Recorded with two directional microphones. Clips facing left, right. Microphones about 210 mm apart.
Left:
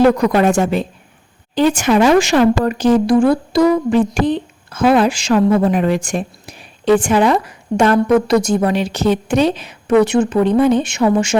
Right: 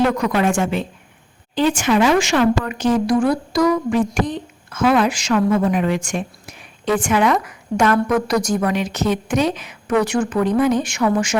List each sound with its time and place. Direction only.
0.0 s a woman's voice: 35° left (ahead or behind)